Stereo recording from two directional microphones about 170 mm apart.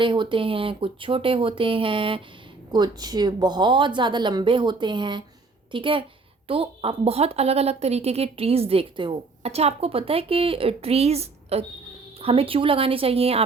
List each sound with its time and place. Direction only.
0.0 s a woman's voice: 30° right (ahead or behind)